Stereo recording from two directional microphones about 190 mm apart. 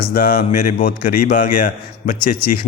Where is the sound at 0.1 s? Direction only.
50° left (ahead or behind).